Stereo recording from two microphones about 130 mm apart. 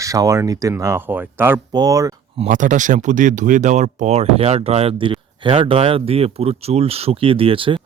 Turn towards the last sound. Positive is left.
turn(degrees=-40)  # may be behind; listen again after turning